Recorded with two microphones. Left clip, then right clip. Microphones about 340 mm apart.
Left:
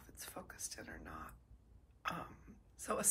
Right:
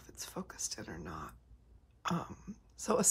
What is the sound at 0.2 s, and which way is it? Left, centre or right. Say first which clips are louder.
Whispering: right 7 dB; centre.